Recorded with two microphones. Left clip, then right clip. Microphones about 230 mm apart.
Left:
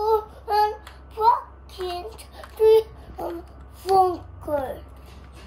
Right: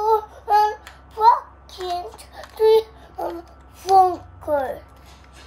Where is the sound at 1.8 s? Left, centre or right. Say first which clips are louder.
Right 4 dB; right.